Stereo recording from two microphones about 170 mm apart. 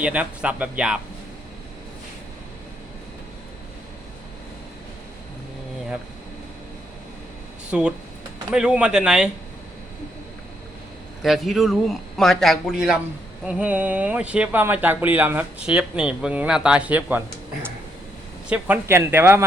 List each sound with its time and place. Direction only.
0.0 s speech: 5° right (ahead or behind)
7.7 s a man's voice: 5° right (ahead or behind)
11.2 s a man's voice: centre (ahead or behind)